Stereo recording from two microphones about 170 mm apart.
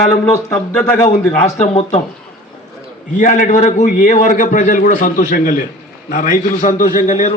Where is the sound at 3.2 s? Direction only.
50° left (ahead or behind).